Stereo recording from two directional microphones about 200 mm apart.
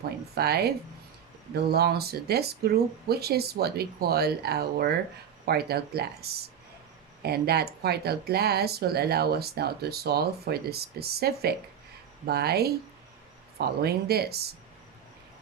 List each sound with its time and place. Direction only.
0.3 s speech: 55° right (ahead or behind)